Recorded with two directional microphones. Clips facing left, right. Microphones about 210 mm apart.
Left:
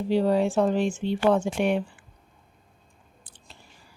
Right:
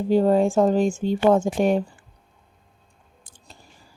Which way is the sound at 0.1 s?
45° right (ahead or behind).